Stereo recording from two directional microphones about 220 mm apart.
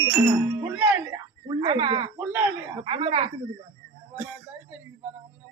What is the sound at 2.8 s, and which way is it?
Speech, 25° right (ahead or behind).